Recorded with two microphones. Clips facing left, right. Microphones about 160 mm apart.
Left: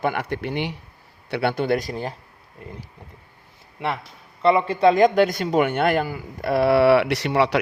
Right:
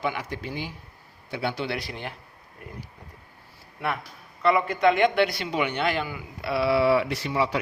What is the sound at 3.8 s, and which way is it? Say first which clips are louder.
A man's voice: left 3 dB; 25° left (ahead or behind).